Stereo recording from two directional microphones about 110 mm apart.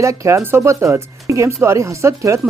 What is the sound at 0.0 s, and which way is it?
Speech, 30° right (ahead or behind).